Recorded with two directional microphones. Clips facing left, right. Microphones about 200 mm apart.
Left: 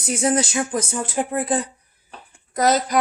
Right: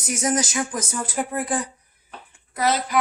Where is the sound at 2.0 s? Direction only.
40° left (ahead or behind).